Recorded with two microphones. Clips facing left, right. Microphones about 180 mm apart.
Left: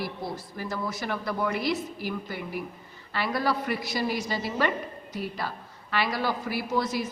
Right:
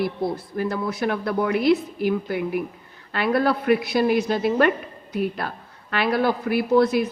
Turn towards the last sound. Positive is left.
turn(degrees=-60)  # may be behind; listen again after turning